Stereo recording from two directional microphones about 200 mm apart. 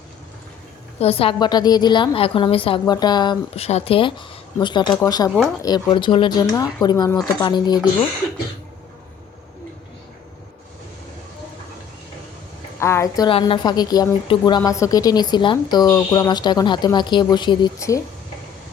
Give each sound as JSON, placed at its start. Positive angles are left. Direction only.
{"t": 0.9, "sound": "a woman's voice", "side_deg": 30}
{"t": 12.8, "sound": "a woman's voice", "side_deg": 15}